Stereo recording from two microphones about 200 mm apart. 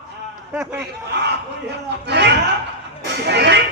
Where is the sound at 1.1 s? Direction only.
55° right (ahead or behind).